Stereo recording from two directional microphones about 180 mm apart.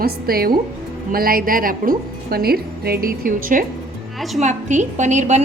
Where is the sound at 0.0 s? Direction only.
55° right (ahead or behind).